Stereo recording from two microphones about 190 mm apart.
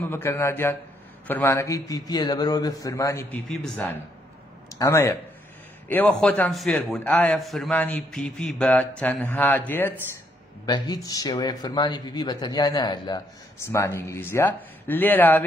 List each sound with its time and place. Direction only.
0.0 s a man's voice: 10° left (ahead or behind)
4.7 s a man's voice: 15° left (ahead or behind)
10.6 s speech: 20° left (ahead or behind)